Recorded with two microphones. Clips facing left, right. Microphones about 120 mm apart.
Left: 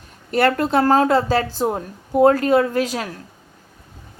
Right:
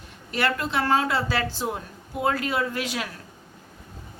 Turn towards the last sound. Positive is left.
turn(degrees=40)  # may be behind; listen again after turning